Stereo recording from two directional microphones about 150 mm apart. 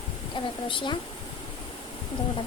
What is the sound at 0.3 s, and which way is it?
Speech, 30° left (ahead or behind).